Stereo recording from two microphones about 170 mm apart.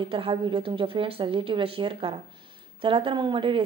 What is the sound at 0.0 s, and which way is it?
Speech, 30° right (ahead or behind).